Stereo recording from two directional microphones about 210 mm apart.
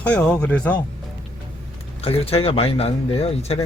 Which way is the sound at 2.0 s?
30° left (ahead or behind).